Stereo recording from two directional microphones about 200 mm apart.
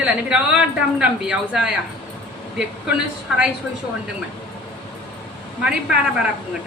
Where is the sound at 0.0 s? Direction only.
5° right (ahead or behind).